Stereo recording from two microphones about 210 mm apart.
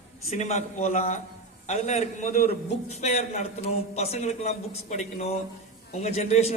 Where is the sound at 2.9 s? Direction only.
30° left (ahead or behind).